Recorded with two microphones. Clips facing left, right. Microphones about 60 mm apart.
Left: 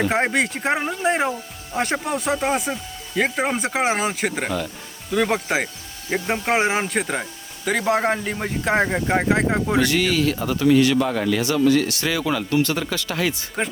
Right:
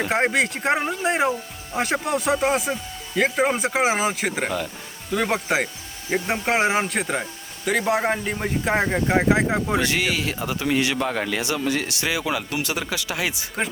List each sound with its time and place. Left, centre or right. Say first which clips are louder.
0.0 s speech: left 1 dB; centre
9.8 s speech: left 4 dB; centre
11.3 s speech: left 6 dB; centre